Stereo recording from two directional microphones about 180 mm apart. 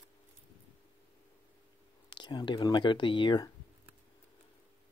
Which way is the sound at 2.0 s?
25° left (ahead or behind).